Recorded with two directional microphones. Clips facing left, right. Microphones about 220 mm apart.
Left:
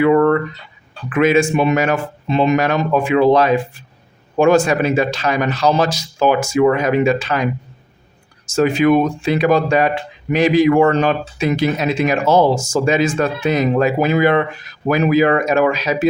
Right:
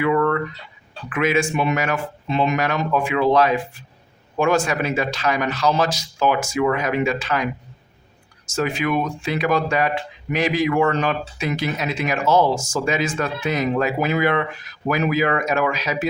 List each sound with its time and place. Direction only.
0.0 s a sound: 35° left (ahead or behind)
1.1 s speech: 30° left (ahead or behind)
8.5 s speech: 30° left (ahead or behind)